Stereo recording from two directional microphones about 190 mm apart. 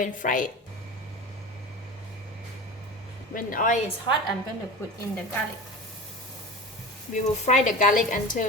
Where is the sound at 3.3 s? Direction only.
45° left (ahead or behind).